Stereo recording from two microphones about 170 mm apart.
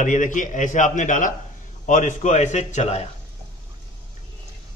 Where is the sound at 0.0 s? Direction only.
45° left (ahead or behind).